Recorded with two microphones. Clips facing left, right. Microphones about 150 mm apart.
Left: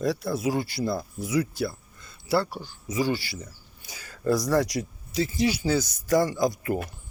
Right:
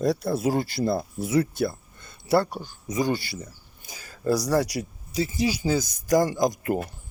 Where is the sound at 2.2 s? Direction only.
50° right (ahead or behind).